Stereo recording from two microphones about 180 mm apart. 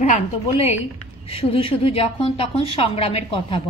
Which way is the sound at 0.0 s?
40° left (ahead or behind).